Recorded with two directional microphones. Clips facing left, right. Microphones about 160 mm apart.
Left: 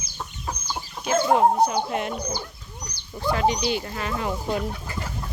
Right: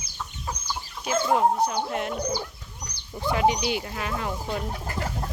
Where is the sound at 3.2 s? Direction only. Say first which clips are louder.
Even; 15° right (ahead or behind).